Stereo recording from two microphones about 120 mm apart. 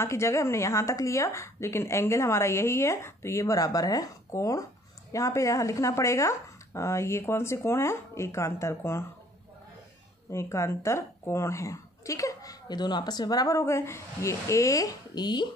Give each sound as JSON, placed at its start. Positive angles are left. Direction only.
{"t": 0.0, "sound": "a woman's voice", "side_deg": 25}
{"t": 10.3, "sound": "a woman's voice", "side_deg": 25}